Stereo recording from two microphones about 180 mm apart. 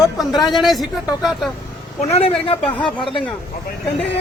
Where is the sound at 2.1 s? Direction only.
35° left (ahead or behind).